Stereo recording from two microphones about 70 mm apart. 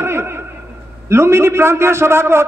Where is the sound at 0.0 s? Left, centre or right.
Right.